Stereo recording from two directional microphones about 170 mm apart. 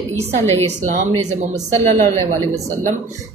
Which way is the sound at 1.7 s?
15° left (ahead or behind).